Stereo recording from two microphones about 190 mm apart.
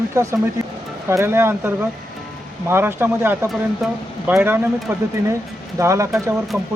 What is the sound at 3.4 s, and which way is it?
Speech, centre (ahead or behind).